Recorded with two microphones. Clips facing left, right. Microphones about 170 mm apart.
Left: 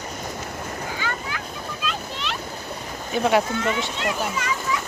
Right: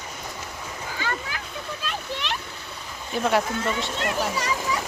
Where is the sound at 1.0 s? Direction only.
35° right (ahead or behind).